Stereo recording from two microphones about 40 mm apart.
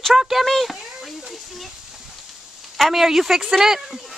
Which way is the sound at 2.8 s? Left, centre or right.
Centre.